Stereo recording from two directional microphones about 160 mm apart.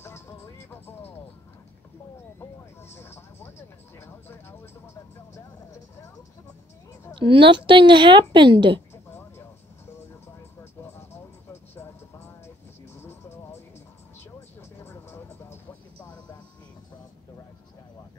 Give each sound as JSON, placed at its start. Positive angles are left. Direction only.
{"t": 0.0, "sound": "music", "side_deg": 15}
{"t": 2.9, "sound": "vehicle", "side_deg": 15}
{"t": 4.0, "sound": "a sound", "side_deg": 15}
{"t": 7.2, "sound": "a woman's voice", "side_deg": -30}
{"t": 9.9, "sound": "vehicle", "side_deg": 15}
{"t": 14.8, "sound": "vehicle", "side_deg": 15}